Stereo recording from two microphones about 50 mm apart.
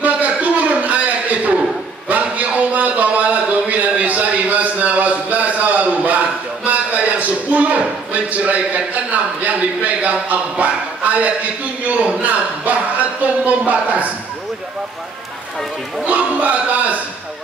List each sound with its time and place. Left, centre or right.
0.0 s a sound: right
11.9 s a man's voice: right
16.1 s a man's voice: right